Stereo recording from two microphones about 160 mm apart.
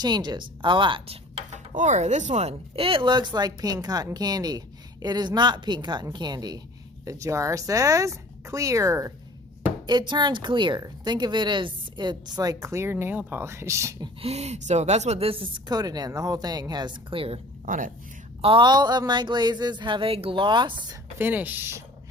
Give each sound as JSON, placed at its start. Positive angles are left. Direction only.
{"t": 0.0, "sound": "speech", "side_deg": -25}
{"t": 14.2, "sound": "a woman's voice", "side_deg": -40}
{"t": 17.7, "sound": "speech", "side_deg": -55}
{"t": 18.4, "sound": "speech", "side_deg": -30}
{"t": 21.2, "sound": "speech", "side_deg": -10}